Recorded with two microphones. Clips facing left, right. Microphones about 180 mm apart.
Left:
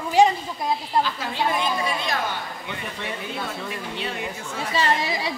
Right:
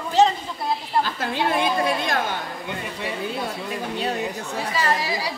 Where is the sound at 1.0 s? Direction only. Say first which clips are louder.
Right 2 dB; 55° right (ahead or behind).